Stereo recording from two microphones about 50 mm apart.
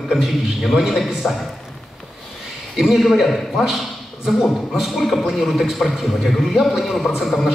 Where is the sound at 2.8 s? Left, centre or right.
Centre.